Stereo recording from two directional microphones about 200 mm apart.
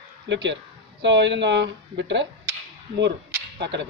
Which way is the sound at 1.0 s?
60° right (ahead or behind).